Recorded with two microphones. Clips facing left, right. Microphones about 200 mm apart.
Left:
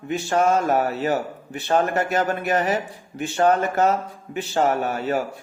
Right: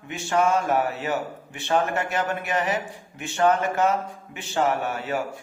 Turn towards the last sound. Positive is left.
turn(degrees=40)  # may be behind; listen again after turning